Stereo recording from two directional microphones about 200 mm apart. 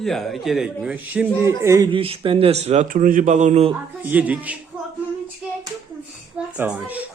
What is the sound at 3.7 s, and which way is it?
Speech, 10° right (ahead or behind).